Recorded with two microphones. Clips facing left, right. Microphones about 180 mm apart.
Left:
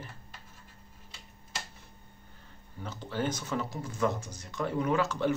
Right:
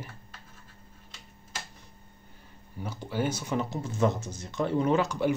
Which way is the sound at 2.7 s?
10° right (ahead or behind).